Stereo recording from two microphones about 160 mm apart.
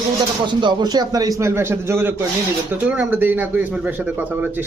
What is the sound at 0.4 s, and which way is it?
A man's voice, 30° right (ahead or behind).